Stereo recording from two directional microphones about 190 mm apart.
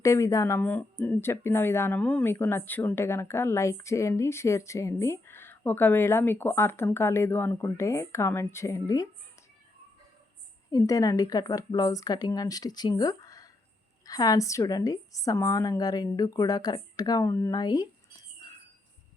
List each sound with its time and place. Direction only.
0.0 s speech: 15° left (ahead or behind)
10.7 s a woman's voice: 20° left (ahead or behind)